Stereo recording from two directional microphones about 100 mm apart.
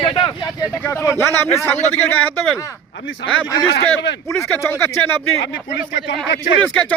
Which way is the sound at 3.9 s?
25° left (ahead or behind).